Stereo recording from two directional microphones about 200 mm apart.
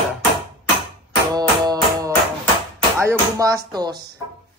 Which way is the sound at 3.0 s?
15° right (ahead or behind).